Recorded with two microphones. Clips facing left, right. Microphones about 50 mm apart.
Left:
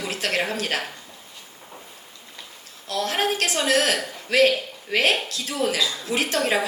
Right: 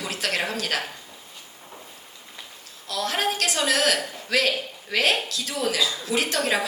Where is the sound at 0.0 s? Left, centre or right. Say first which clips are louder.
Left 2 dB; left.